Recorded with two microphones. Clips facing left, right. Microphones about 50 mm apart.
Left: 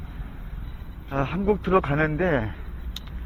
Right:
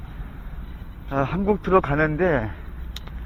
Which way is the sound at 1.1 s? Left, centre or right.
Centre.